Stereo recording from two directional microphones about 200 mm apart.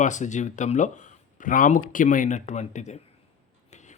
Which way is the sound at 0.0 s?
35° left (ahead or behind).